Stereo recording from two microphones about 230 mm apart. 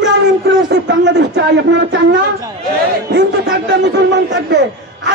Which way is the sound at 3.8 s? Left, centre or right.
Right.